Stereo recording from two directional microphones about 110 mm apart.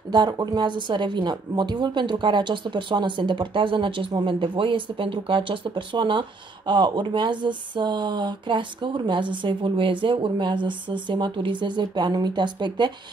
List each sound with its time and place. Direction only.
0.1 s speech: 40° right (ahead or behind)